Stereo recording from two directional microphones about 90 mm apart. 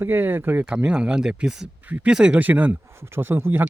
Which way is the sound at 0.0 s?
25° right (ahead or behind).